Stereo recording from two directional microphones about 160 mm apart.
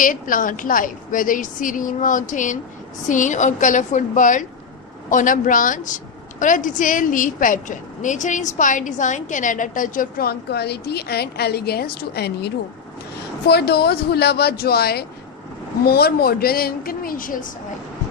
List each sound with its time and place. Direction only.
0.0 s a woman's voice: 60° left (ahead or behind)